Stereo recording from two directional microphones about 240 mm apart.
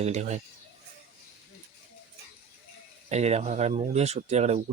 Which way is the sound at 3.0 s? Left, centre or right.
Right.